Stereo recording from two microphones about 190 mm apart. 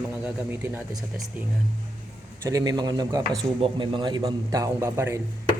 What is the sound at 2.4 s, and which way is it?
A man's voice, 20° right (ahead or behind).